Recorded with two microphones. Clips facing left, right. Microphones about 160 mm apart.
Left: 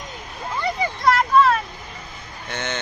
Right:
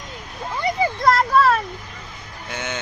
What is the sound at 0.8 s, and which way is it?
Vehicle, 35° right (ahead or behind).